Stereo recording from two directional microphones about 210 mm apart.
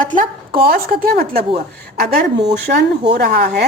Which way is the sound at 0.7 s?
45° right (ahead or behind).